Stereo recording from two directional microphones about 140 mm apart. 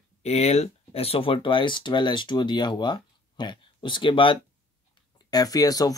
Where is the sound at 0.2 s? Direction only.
50° left (ahead or behind).